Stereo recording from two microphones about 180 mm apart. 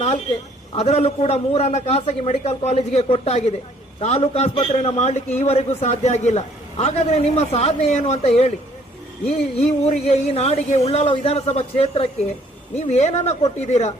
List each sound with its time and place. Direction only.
0.8 s a man's voice: 35° left (ahead or behind)
9.6 s a man's voice: 35° left (ahead or behind)